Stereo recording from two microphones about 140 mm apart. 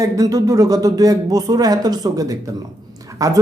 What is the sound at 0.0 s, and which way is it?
A man's voice, 25° right (ahead or behind).